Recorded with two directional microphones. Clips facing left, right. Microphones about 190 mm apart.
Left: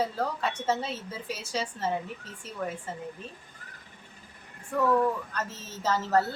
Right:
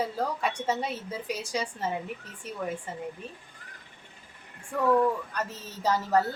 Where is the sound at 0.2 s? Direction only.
15° right (ahead or behind).